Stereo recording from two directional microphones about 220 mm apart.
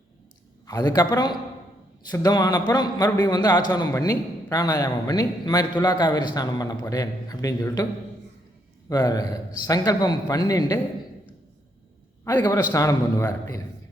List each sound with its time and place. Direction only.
0.7 s a man's voice: 15° left (ahead or behind)
8.9 s a man's voice: 15° left (ahead or behind)
12.2 s a man's voice: 15° left (ahead or behind)